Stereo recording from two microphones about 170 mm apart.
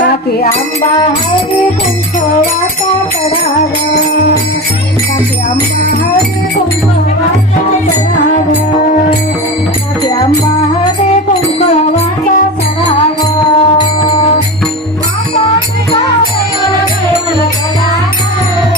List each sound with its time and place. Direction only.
13.6 s music: 30° left (ahead or behind)